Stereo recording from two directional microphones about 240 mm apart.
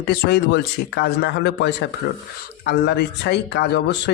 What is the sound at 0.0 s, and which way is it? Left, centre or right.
A man's voice, left.